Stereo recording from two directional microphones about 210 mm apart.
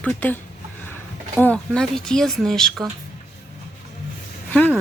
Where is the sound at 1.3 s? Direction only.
5° left (ahead or behind).